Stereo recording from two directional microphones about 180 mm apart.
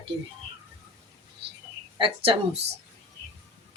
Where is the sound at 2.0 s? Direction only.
30° right (ahead or behind).